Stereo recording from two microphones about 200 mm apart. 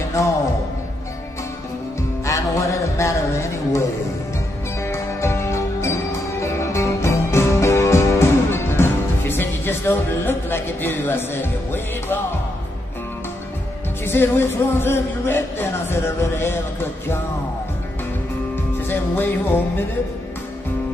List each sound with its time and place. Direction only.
0.2 s music: 15° left (ahead or behind)
2.2 s music: 15° left (ahead or behind)
4.8 s music: 15° left (ahead or behind)
14.0 s music: 10° left (ahead or behind)
18.9 s music: 10° left (ahead or behind)